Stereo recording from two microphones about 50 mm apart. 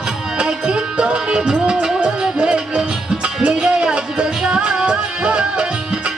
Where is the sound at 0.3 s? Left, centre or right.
Centre.